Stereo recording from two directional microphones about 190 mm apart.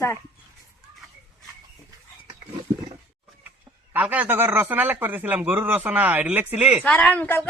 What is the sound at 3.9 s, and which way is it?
Speech, 10° right (ahead or behind).